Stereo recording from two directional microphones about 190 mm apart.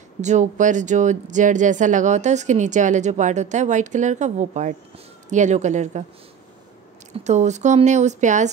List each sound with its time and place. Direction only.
0.2 s speech: 40° right (ahead or behind)
7.2 s speech: 35° right (ahead or behind)